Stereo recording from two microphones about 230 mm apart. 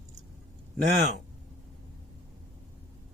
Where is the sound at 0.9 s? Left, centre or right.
Right.